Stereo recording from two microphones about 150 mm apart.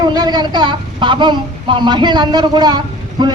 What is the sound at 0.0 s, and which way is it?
A woman's voice, 30° right (ahead or behind).